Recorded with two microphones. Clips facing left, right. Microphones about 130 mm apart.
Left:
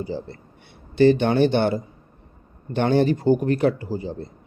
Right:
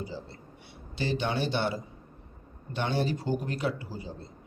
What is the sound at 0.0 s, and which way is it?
A man's voice, 55° left (ahead or behind).